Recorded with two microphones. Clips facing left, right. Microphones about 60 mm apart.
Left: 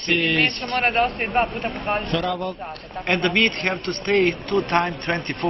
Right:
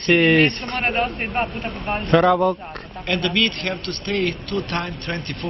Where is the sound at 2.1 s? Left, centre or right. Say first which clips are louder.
Right 9 dB; right.